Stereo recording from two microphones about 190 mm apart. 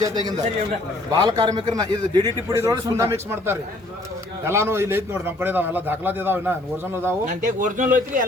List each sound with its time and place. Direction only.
1.1 s a man's voice: 20° right (ahead or behind)
7.4 s speech: 40° right (ahead or behind)